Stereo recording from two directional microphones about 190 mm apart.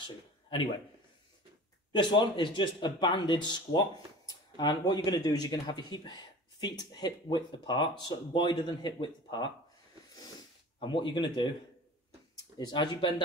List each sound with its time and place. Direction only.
0.0 s a sound: 25° left (ahead or behind)
1.9 s speech: 25° left (ahead or behind)
10.8 s speech: 25° left (ahead or behind)
12.5 s speech: 20° left (ahead or behind)